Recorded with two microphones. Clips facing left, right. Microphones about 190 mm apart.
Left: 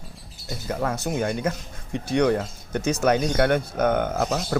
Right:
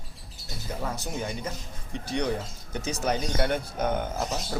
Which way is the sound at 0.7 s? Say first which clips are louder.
Left 7 dB; 60° left (ahead or behind).